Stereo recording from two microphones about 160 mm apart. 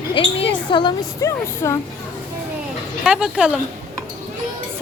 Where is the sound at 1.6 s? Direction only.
20° left (ahead or behind).